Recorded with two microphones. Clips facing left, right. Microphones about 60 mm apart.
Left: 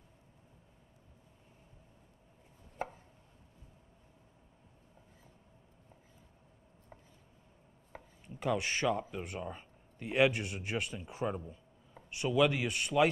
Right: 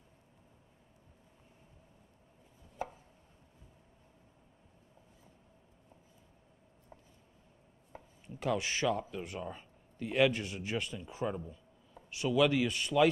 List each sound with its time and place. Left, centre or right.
2.8 s chopping: left
8.4 s speech: centre